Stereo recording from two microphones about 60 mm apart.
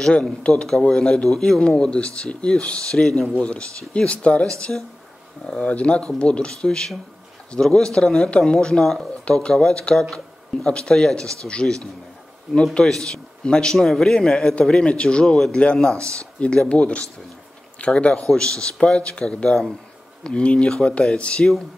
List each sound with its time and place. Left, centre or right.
0.0 s speech: centre
12.7 s speech: centre
16.0 s speech: right
16.3 s speech: centre